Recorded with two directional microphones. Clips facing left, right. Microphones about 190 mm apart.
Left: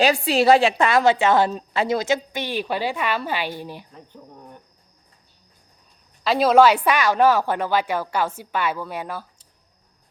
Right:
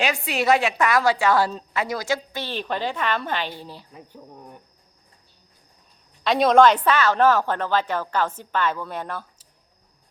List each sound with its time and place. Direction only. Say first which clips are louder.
0.0 s a woman's voice: left 6 dB; 35° left (ahead or behind); by 3.8 s 15° left (ahead or behind)
3.9 s speech: right 1 dB; 5° right (ahead or behind)
6.2 s a woman's voice: left 1 dB; 5° left (ahead or behind)